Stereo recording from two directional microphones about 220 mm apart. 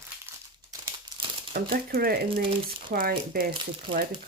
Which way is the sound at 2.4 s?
25° right (ahead or behind).